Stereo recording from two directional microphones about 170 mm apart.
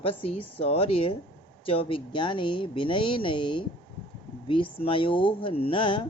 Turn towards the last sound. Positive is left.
turn(degrees=30)  # may be behind; listen again after turning